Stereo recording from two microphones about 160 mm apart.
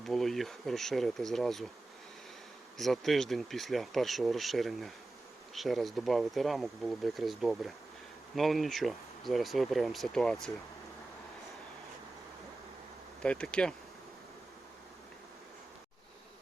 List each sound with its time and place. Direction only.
0.0 s speech: centre (ahead or behind)
2.7 s speech: centre (ahead or behind)
13.2 s speech: 5° left (ahead or behind)